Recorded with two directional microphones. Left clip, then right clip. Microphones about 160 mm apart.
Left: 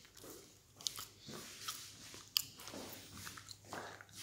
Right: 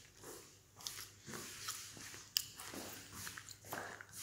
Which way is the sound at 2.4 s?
25° left (ahead or behind).